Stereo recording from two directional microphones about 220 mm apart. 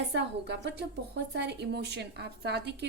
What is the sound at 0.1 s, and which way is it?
A woman's voice, 50° right (ahead or behind).